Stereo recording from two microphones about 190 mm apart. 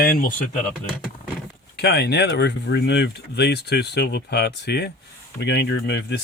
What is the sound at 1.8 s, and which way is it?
Speech, 60° left (ahead or behind).